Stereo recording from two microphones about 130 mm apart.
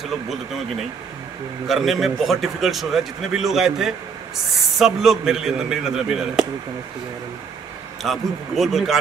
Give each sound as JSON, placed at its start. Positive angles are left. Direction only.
{"t": 0.0, "sound": "a man's voice", "side_deg": 0}
{"t": 8.0, "sound": "a man's voice", "side_deg": 0}